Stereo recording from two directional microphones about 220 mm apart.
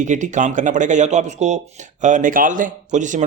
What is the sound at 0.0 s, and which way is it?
Speech, 35° right (ahead or behind).